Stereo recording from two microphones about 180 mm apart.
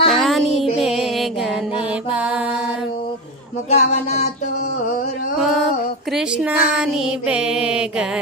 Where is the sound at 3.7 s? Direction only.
35° left (ahead or behind).